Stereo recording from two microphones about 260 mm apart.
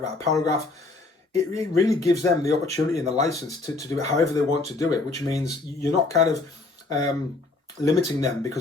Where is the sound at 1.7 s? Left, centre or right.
Centre.